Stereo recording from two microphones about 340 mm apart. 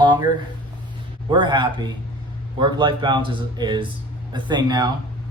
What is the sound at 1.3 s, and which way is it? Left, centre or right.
Speech, centre.